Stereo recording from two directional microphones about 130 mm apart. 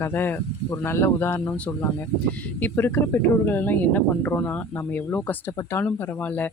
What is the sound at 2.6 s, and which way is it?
Speech, 15° left (ahead or behind).